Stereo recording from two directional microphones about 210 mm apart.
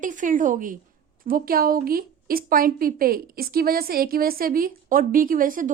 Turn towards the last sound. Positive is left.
turn(degrees=-40)  # may be behind; listen again after turning